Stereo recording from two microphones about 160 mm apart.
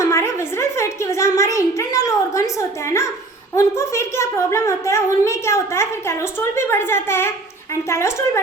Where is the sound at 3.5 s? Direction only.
20° left (ahead or behind).